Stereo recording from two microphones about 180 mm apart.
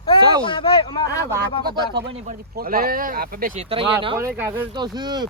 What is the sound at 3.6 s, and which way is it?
Speech, 30° right (ahead or behind).